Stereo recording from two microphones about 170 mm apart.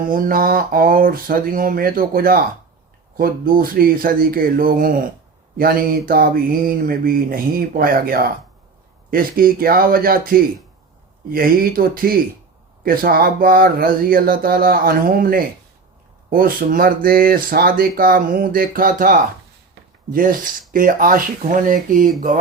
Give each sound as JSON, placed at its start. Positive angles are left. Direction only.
{"t": 0.1, "sound": "speech", "side_deg": -55}